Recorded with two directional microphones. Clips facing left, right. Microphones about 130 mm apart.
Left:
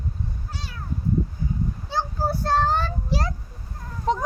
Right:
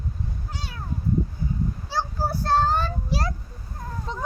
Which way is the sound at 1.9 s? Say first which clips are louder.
Left 2 dB; 20° left (ahead or behind).